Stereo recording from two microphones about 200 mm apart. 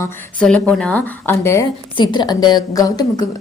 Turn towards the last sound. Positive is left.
turn(degrees=20)  # may be behind; listen again after turning